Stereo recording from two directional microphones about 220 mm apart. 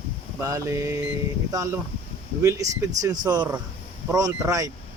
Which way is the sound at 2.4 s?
15° right (ahead or behind).